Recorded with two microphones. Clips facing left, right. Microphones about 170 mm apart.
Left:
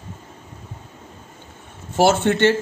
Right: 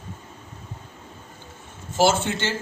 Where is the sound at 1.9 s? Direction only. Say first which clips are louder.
Left 4 dB; 60° left (ahead or behind).